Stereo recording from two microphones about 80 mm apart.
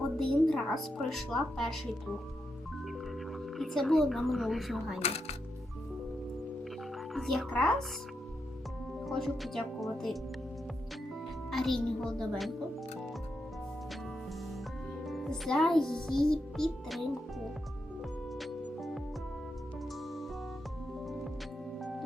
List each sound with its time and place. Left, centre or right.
0.2 s a child's voice: centre
3.3 s a child's voice: centre
7.1 s speech: centre
7.5 s speech: centre
9.0 s a child's voice: centre
11.5 s a child's voice: centre
15.0 s a child's voice: centre
18.3 s music: centre